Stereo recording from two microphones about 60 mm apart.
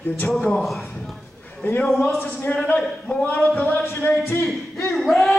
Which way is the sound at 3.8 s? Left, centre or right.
Left.